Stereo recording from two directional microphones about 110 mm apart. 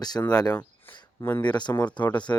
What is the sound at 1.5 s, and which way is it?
Speech, 40° left (ahead or behind).